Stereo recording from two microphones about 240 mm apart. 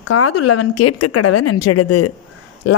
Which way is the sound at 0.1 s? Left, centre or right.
Left.